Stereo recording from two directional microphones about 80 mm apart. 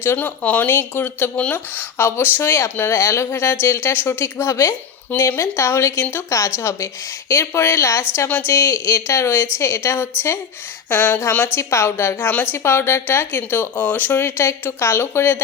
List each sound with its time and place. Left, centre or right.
0.0 s a woman's voice: left
2.9 s a woman's voice: left